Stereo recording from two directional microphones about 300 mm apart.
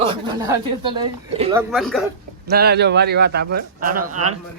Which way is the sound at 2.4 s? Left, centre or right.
Right.